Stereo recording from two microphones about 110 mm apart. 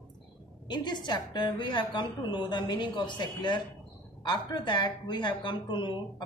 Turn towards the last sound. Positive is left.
turn(degrees=45)  # may be behind; listen again after turning